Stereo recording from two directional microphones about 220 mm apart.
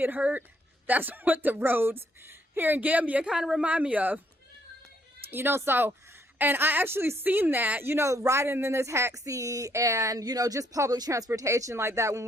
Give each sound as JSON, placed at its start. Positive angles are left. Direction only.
{"t": 0.0, "sound": "speech", "side_deg": -5}
{"t": 5.3, "sound": "speech", "side_deg": -10}